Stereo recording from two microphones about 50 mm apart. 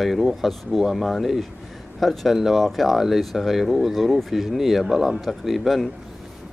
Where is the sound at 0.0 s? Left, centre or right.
Centre.